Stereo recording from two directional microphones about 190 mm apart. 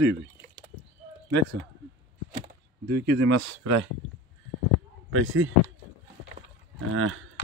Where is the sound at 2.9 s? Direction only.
65° right (ahead or behind); by 3.9 s 90° right.